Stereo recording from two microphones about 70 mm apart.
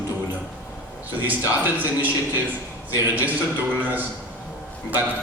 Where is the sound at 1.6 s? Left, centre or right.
Right.